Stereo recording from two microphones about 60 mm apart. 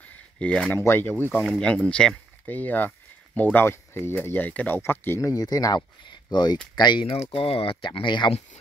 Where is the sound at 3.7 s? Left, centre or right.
Left.